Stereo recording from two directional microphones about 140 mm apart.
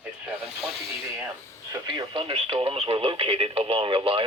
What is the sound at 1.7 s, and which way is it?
Speech, 35° right (ahead or behind).